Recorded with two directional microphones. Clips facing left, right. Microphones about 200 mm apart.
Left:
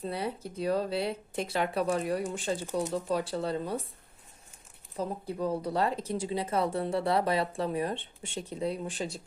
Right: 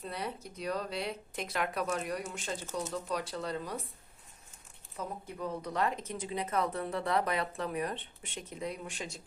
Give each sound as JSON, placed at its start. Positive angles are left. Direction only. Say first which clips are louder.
{"t": 0.0, "sound": "speech", "louder": "left 5 dB", "side_deg": 30}
{"t": 4.9, "sound": "speech", "louder": "left 7 dB", "side_deg": 30}